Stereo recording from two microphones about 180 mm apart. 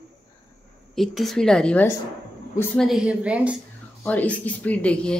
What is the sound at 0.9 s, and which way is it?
A woman's voice, centre (ahead or behind).